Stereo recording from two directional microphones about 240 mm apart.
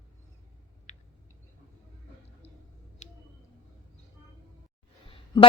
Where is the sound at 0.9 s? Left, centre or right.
Left.